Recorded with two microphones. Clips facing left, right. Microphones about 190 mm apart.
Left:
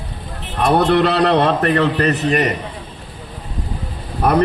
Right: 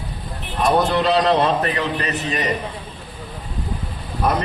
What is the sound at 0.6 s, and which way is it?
A man's voice, 60° left (ahead or behind).